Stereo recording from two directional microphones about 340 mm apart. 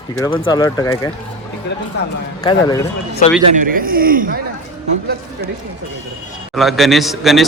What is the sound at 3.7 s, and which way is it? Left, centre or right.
Speech, right.